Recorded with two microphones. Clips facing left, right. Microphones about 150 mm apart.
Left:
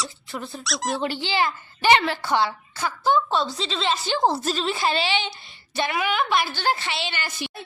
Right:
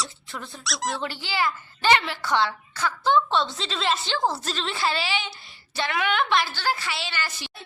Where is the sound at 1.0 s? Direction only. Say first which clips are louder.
Left 4 dB; 20° left (ahead or behind).